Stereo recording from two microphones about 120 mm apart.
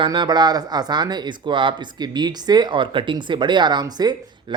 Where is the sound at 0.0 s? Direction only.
40° right (ahead or behind).